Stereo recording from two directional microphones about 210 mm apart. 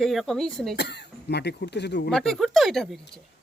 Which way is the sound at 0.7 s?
55° left (ahead or behind).